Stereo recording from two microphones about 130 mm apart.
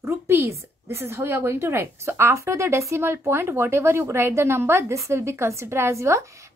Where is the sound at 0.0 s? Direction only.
20° right (ahead or behind).